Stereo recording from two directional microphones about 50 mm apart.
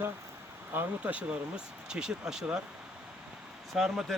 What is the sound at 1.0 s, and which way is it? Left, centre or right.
Speech, right.